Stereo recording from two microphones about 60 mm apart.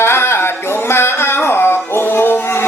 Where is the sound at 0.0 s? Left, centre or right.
Left.